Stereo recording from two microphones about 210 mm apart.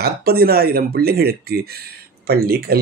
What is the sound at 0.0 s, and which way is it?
Speech, 45° right (ahead or behind).